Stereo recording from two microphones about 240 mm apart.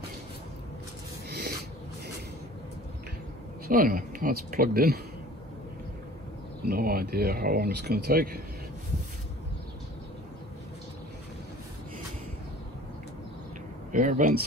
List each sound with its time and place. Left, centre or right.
3.6 s speech: right
6.6 s speech: right
13.9 s speech: right